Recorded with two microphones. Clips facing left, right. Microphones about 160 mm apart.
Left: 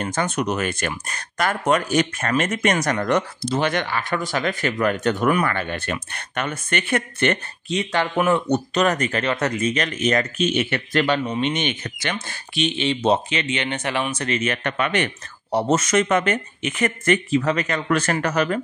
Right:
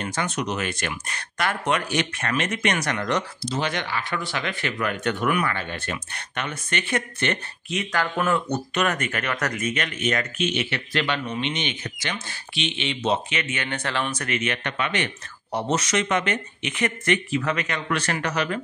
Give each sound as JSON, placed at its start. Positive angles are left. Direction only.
{"t": 0.0, "sound": "speech", "side_deg": 45}
{"t": 7.7, "sound": "speech", "side_deg": 25}
{"t": 8.7, "sound": "speech", "side_deg": 35}
{"t": 14.1, "sound": "speech", "side_deg": 30}
{"t": 14.4, "sound": "speech", "side_deg": 45}